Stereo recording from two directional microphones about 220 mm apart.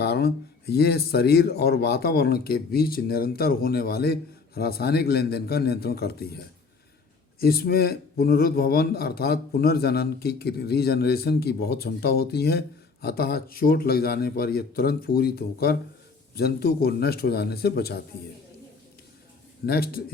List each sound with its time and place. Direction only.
0.0 s speech: 45° left (ahead or behind)
19.6 s speech: 45° left (ahead or behind)